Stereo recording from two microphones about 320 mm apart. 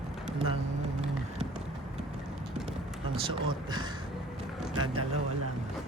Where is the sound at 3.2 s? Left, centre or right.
Centre.